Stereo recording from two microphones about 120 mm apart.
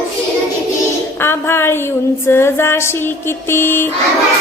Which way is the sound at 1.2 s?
20° left (ahead or behind).